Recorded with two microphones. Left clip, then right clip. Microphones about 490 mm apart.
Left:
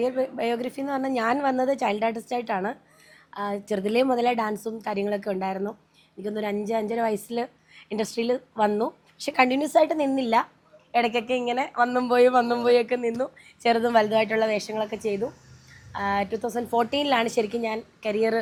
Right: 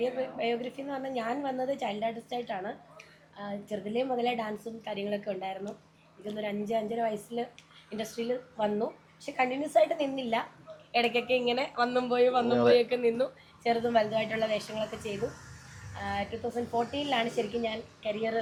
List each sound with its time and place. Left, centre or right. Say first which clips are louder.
0.0 s a woman's voice: left 6 dB; left
12.1 s a woman's voice: left 7 dB; left
13.0 s a woman's voice: left 1 dB; left
13.6 s a woman's voice: left 6 dB; left
16.0 s a woman's voice: left 8 dB; left